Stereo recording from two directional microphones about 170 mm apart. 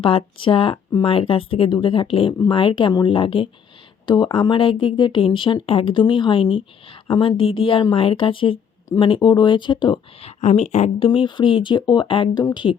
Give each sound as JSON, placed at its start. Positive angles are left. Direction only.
{"t": 0.0, "sound": "a woman's voice", "side_deg": 30}